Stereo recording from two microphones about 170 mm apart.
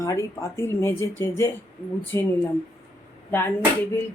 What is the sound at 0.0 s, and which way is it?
Speech, 20° left (ahead or behind).